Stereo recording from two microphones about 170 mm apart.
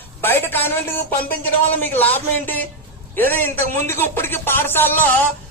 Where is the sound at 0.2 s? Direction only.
10° left (ahead or behind).